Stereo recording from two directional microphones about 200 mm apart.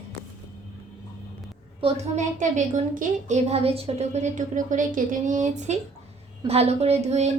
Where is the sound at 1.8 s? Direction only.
35° right (ahead or behind).